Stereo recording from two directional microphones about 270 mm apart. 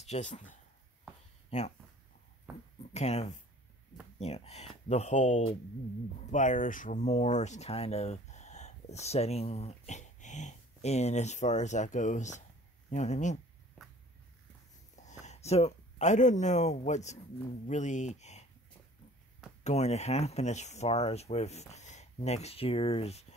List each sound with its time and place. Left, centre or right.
0.0 s speech: left
2.9 s speech: left
15.0 s speech: left
19.6 s speech: left